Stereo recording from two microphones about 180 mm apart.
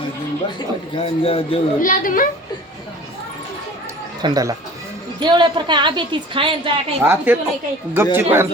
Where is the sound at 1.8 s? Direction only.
50° left (ahead or behind).